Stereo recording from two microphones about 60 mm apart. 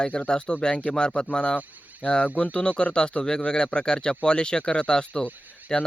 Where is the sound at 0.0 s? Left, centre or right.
Centre.